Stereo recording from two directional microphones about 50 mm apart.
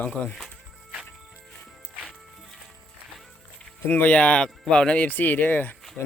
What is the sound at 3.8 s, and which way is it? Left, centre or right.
Speech, left.